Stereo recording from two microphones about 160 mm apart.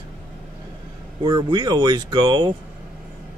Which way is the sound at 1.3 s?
25° right (ahead or behind).